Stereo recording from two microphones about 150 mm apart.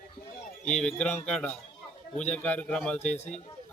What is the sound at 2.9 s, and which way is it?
Speech, 50° left (ahead or behind).